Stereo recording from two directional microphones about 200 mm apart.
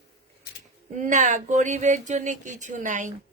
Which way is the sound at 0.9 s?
40° right (ahead or behind).